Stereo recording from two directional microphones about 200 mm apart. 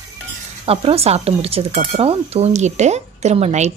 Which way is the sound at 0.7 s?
30° right (ahead or behind).